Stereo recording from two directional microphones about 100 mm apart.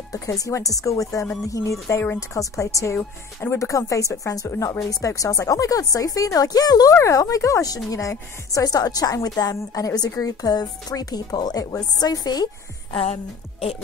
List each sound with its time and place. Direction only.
0.1 s a woman's voice: 30° left (ahead or behind)
12.9 s a woman's voice: 80° left